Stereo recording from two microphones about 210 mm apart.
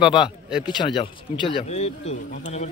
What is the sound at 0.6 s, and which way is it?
Speech, 20° left (ahead or behind).